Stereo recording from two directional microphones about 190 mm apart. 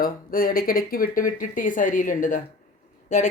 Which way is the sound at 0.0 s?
50° left (ahead or behind).